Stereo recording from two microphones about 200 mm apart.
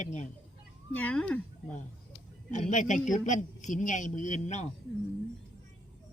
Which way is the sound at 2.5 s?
35° left (ahead or behind).